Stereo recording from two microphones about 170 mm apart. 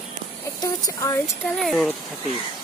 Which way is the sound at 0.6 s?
20° left (ahead or behind).